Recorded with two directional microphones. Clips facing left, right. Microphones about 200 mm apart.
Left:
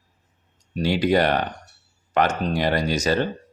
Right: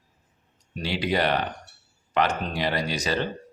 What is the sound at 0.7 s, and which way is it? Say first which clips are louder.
Speech: left 6 dB; 45° left (ahead or behind).